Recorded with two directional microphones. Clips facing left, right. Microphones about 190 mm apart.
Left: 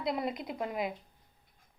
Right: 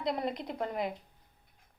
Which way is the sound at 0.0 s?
10° left (ahead or behind).